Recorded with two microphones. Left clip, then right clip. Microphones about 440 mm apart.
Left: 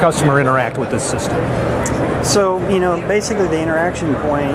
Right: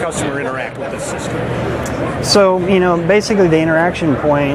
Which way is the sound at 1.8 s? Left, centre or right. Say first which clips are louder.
Even; right.